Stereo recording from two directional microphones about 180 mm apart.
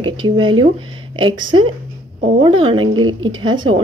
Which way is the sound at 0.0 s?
25° right (ahead or behind).